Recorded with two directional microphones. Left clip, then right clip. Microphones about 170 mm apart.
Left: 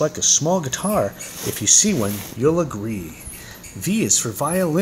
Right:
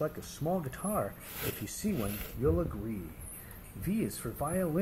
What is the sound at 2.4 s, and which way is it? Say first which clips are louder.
Speech: left 13 dB; 35° left (ahead or behind).